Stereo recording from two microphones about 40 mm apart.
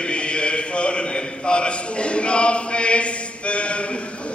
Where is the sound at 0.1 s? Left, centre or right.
Left.